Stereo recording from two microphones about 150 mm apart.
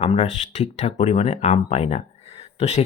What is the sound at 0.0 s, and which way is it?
Speech, 40° left (ahead or behind).